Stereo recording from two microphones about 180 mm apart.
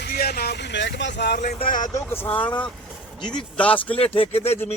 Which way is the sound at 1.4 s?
50° left (ahead or behind).